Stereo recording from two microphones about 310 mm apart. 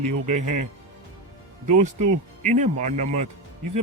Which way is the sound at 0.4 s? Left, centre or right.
Right.